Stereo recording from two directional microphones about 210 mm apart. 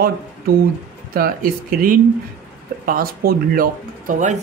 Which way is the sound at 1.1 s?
45° right (ahead or behind).